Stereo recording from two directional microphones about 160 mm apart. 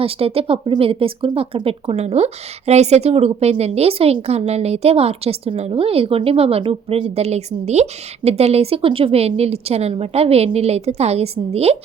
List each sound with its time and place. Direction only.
0.0 s speech: 35° right (ahead or behind)